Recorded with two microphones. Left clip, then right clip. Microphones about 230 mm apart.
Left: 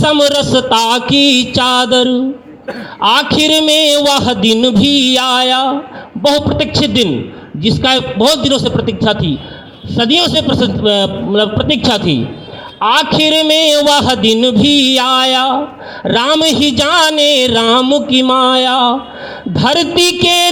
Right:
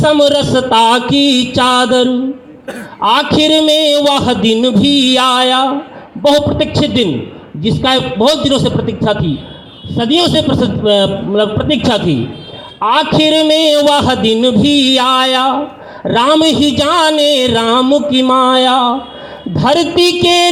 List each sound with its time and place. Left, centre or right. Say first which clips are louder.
0.0 s speech: right 1 dB; left